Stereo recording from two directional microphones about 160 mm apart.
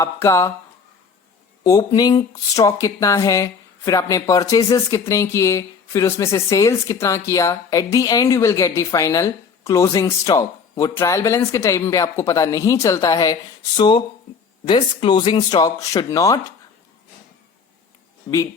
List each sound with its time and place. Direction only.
0.0 s speech: 20° left (ahead or behind)
1.6 s speech: 25° left (ahead or behind)
18.3 s speech: 20° left (ahead or behind)